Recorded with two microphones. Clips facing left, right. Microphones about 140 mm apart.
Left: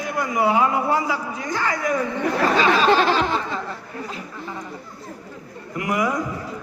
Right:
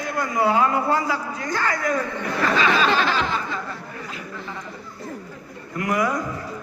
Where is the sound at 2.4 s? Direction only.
35° left (ahead or behind).